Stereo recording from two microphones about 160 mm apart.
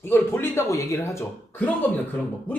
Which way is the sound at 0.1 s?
15° left (ahead or behind).